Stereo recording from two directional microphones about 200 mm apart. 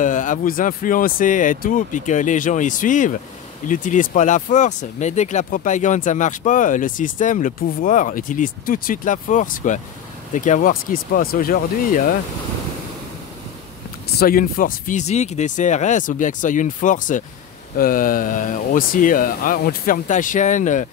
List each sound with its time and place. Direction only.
0.0 s speech: 40° left (ahead or behind)
14.0 s speech: 45° left (ahead or behind)